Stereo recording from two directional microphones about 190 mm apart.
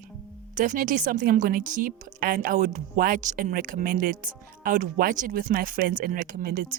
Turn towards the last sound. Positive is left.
turn(degrees=-50)  # may be behind; listen again after turning